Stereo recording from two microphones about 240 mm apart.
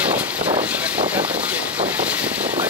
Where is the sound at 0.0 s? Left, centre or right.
Centre.